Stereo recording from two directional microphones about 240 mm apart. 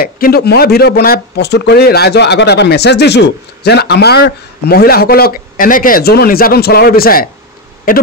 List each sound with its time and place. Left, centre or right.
0.0 s speech: left